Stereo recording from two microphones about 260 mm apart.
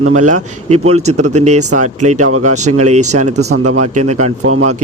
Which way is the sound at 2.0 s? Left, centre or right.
Right.